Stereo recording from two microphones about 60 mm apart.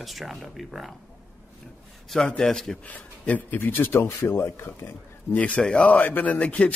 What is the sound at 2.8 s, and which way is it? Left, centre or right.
Speech, left.